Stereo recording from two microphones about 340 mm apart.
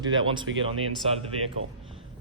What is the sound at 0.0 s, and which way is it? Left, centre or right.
Speech, centre.